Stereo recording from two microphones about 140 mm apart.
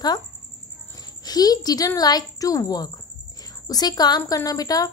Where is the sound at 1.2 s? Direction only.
30° left (ahead or behind).